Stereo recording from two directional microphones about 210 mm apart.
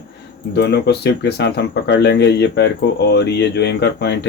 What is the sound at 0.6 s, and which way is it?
Speech, 50° left (ahead or behind).